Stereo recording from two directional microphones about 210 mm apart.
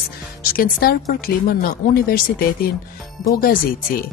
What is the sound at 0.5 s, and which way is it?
Speech, 45° left (ahead or behind).